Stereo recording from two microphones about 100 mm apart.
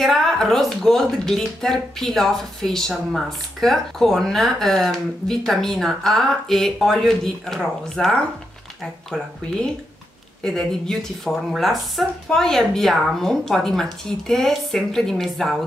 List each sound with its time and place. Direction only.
0.0 s speech: centre (ahead or behind)
10.4 s speech: 5° left (ahead or behind)